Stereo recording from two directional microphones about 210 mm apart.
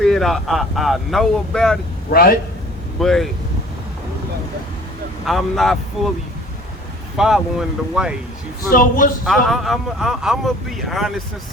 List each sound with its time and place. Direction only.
0.0 s speech: centre (ahead or behind)
2.0 s a man's voice: 45° left (ahead or behind)
3.0 s speech: centre (ahead or behind)
5.2 s speech: centre (ahead or behind)
7.2 s speech: centre (ahead or behind)
8.7 s a man's voice: 40° left (ahead or behind)
9.2 s speech: centre (ahead or behind)